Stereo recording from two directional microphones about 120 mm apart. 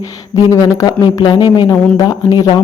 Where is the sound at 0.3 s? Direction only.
30° left (ahead or behind).